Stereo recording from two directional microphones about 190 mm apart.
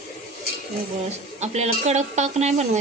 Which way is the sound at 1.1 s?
35° right (ahead or behind).